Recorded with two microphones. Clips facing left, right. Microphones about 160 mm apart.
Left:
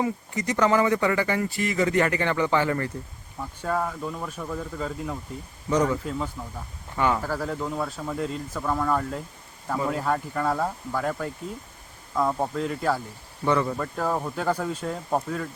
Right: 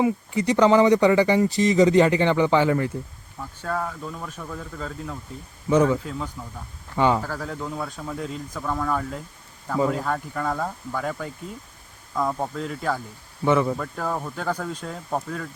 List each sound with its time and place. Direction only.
0.0 s speech: 15° right (ahead or behind)
3.4 s speech: 10° left (ahead or behind)
5.6 s speech: 10° right (ahead or behind)
6.1 s a man's voice: centre (ahead or behind)
6.9 s speech: 20° right (ahead or behind)
7.2 s a man's voice: 10° left (ahead or behind)
13.4 s speech: 10° right (ahead or behind)
13.7 s a man's voice: 5° left (ahead or behind)